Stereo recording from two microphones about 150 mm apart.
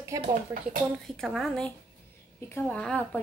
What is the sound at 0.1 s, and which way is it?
Speech, 25° right (ahead or behind).